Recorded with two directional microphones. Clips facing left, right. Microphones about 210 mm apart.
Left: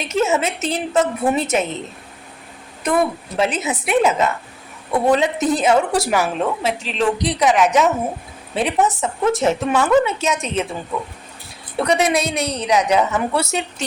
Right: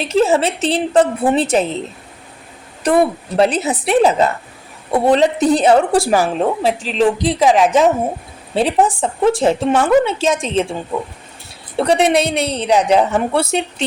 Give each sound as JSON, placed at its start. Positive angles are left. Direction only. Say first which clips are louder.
{"t": 0.0, "sound": "a woman's voice", "louder": "right 5 dB", "side_deg": -35}
{"t": 2.8, "sound": "a woman's voice", "louder": "right 5 dB", "side_deg": -30}
{"t": 12.1, "sound": "speech", "louder": "right 4 dB", "side_deg": -55}
{"t": 12.5, "sound": "a woman's voice", "louder": "right 3 dB", "side_deg": -30}
{"t": 13.4, "sound": "speech", "louder": "right 4 dB", "side_deg": -55}